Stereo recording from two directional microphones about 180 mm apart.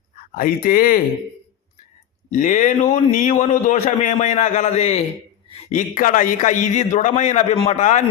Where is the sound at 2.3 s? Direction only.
45° left (ahead or behind).